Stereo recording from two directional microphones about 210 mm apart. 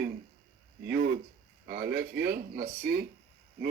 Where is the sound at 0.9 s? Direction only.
45° right (ahead or behind).